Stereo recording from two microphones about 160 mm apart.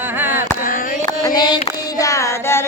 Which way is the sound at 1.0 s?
25° left (ahead or behind).